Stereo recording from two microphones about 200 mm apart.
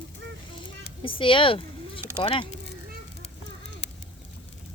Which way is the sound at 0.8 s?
25° left (ahead or behind).